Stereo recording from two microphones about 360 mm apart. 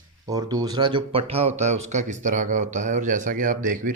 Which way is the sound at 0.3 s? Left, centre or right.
Centre.